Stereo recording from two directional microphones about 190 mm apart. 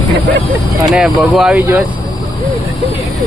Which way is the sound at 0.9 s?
5° right (ahead or behind).